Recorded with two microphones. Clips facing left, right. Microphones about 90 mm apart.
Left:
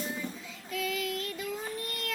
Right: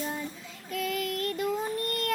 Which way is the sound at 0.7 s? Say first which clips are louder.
Right 2 dB; 50° right (ahead or behind).